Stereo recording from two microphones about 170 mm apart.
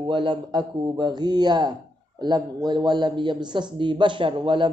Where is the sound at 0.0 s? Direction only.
30° right (ahead or behind).